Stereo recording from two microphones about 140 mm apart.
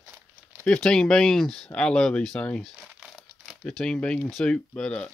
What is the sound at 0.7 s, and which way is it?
Speech, 5° left (ahead or behind).